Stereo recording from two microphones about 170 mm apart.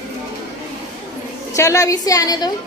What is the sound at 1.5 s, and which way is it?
Speech, 20° left (ahead or behind).